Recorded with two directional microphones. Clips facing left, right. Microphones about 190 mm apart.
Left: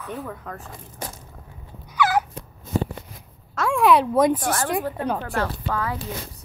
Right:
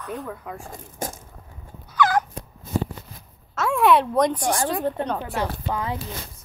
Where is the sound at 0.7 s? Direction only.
45° right (ahead or behind).